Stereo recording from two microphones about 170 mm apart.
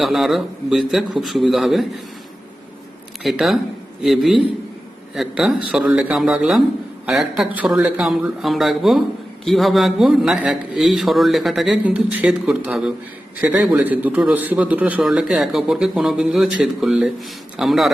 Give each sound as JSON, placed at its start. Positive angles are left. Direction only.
{"t": 0.0, "sound": "a man's voice", "side_deg": 0}
{"t": 3.2, "sound": "a man's voice", "side_deg": 0}